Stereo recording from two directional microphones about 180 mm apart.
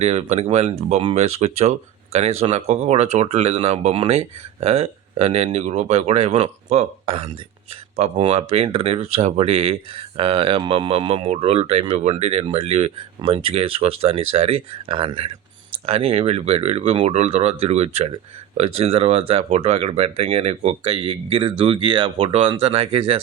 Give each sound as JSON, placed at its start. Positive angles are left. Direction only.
{"t": 0.0, "sound": "speech", "side_deg": -35}